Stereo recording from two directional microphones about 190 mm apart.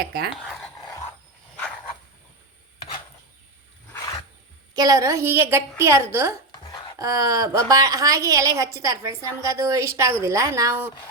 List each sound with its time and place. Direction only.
0.0 s speech: 55° right (ahead or behind)
0.4 s dog: centre (ahead or behind)
4.7 s a woman's voice: 20° right (ahead or behind)